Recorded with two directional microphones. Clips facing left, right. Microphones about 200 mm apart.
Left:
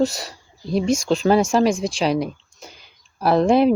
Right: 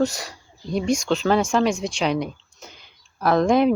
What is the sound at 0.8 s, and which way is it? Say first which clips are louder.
Speech: left 2 dB; 35° left (ahead or behind).